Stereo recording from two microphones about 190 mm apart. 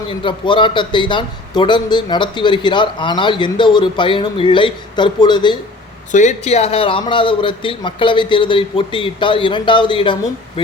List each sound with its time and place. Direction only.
0.1 s a man's voice: 25° left (ahead or behind)
6.1 s a man's voice: 40° left (ahead or behind)